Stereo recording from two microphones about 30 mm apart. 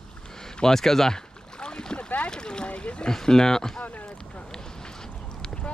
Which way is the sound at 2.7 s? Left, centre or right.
Left.